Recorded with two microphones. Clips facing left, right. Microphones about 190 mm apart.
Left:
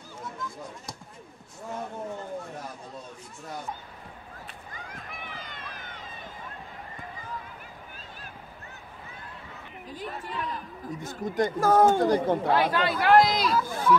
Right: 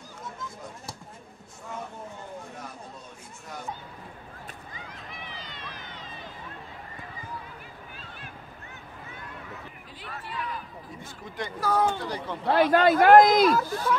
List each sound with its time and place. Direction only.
4.9 s run: 50° left (ahead or behind)
9.8 s a sound: 45° left (ahead or behind)
11.0 s speech: 45° left (ahead or behind)
12.7 s speech: 50° right (ahead or behind)
13.7 s speech: 50° left (ahead or behind)